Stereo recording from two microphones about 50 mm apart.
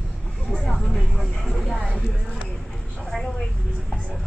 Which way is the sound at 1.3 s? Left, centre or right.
Centre.